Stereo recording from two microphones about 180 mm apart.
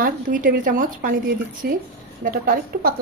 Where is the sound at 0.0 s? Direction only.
50° right (ahead or behind).